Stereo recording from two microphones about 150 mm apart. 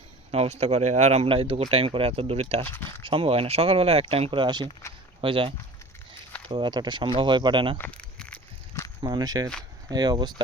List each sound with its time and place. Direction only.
0.3 s speech: 45° right (ahead or behind)
2.6 s speech: 15° left (ahead or behind)
3.0 s speech: 35° right (ahead or behind)
7.8 s a sound: 10° left (ahead or behind)
9.0 s speech: 30° right (ahead or behind)